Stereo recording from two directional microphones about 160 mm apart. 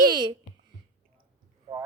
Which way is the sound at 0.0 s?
25° right (ahead or behind).